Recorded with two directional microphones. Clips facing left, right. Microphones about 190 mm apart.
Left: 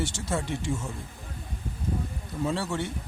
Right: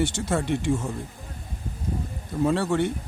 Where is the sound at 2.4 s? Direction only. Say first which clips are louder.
Right 7 dB; 55° right (ahead or behind).